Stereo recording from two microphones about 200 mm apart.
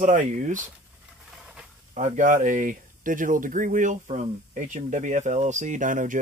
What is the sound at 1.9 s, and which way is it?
Speech, 40° right (ahead or behind).